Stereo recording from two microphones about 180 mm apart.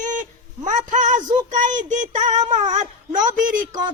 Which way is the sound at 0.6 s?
45° right (ahead or behind).